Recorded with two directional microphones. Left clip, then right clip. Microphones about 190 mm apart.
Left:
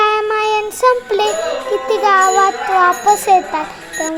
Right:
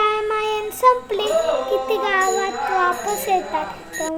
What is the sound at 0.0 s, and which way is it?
Music, 30° left (ahead or behind).